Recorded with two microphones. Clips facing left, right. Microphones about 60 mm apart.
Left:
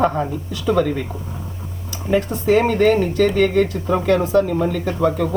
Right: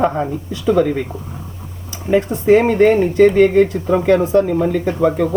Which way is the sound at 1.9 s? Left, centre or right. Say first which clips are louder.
Right 3 dB; right.